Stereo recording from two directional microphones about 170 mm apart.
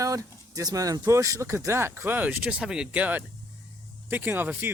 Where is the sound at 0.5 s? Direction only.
20° right (ahead or behind).